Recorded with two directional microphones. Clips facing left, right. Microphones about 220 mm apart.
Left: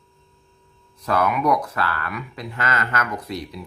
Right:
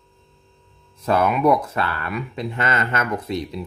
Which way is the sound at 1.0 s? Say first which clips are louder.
Right 3 dB; 25° right (ahead or behind).